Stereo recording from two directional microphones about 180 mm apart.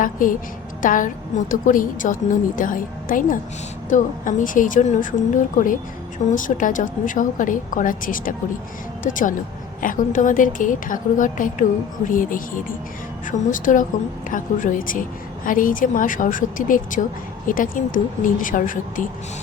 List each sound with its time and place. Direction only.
0.0 s a woman's voice: 50° left (ahead or behind)